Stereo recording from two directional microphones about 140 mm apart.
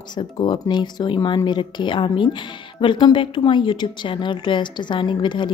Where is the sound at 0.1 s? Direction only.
30° left (ahead or behind).